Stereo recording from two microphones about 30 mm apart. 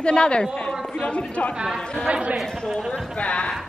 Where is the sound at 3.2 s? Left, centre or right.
Left.